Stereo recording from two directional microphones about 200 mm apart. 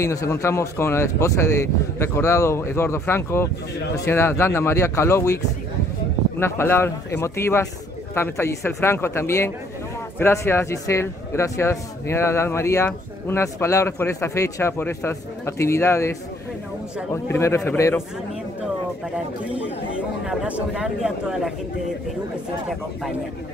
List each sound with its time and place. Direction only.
0.0 s a man's voice: 15° left (ahead or behind)
6.4 s a man's voice: 10° left (ahead or behind)
20.2 s speech: 5° right (ahead or behind)